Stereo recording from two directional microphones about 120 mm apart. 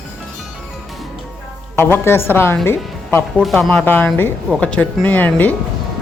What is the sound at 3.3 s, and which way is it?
Speech, centre (ahead or behind).